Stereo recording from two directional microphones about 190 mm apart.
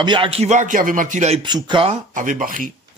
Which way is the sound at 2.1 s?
45° right (ahead or behind).